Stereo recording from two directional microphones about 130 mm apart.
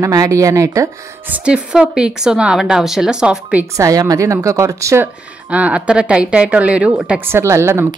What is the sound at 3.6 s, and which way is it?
Speech, 25° right (ahead or behind).